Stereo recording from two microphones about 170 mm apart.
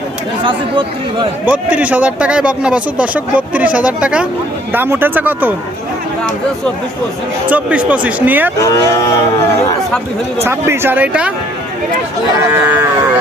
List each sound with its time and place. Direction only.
0.4 s speech: 25° right (ahead or behind)
1.5 s a man's voice: 10° right (ahead or behind)
7.4 s a man's voice: 10° right (ahead or behind)
8.5 s speech: 20° left (ahead or behind)
10.4 s a man's voice: 15° right (ahead or behind)
12.5 s a man's voice: 15° right (ahead or behind)